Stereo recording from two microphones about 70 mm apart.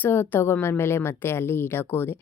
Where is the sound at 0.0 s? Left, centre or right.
Left.